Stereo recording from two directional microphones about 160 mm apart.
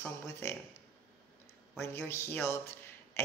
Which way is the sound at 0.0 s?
15° left (ahead or behind).